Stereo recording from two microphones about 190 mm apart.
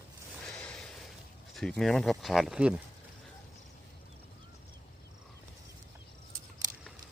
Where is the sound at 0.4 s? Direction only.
5° left (ahead or behind).